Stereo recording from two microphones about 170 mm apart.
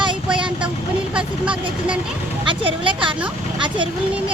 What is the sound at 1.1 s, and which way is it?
Speech, 5° right (ahead or behind).